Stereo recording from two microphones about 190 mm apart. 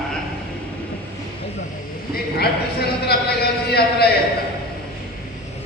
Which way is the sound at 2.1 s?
55° left (ahead or behind).